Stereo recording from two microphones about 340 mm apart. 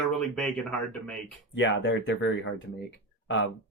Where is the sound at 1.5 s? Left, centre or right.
Left.